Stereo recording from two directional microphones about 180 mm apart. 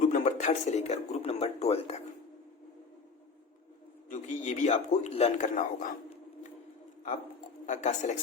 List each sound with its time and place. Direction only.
0.0 s speech: 45° left (ahead or behind)
4.1 s a man's voice: 45° left (ahead or behind)
7.7 s a man's voice: 40° left (ahead or behind)